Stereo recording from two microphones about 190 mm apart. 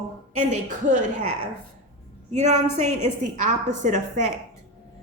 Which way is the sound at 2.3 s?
35° right (ahead or behind).